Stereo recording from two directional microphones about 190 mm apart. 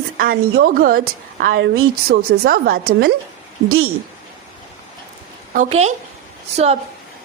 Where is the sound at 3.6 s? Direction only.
90° right.